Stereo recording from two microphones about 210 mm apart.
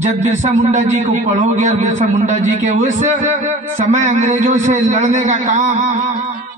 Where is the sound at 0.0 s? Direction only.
35° right (ahead or behind).